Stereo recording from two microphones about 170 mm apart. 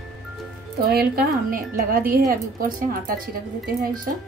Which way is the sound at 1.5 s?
55° right (ahead or behind).